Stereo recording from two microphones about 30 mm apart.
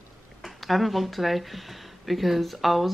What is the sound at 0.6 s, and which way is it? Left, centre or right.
Speech, centre.